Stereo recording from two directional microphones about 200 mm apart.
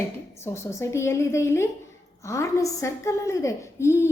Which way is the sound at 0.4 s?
15° left (ahead or behind).